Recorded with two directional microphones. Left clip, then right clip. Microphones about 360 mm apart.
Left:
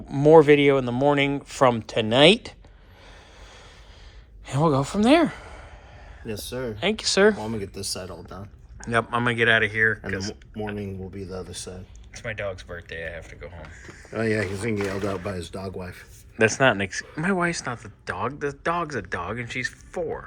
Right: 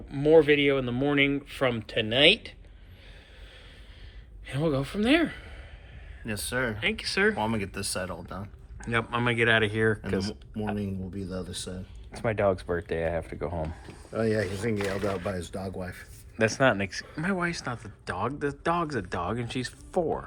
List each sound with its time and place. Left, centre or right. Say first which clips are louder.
0.1 s speech: left 6 dB; centre
4.6 s speech: left 6 dB; centre
14.1 s speech: left 2 dB; left
16.4 s speech: left 4 dB; centre